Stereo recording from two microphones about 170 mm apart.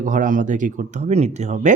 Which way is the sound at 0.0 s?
50° right (ahead or behind).